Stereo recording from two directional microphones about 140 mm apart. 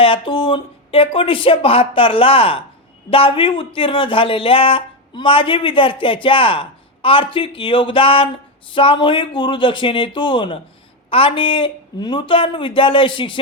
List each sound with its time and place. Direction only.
0.0 s speech: 40° left (ahead or behind)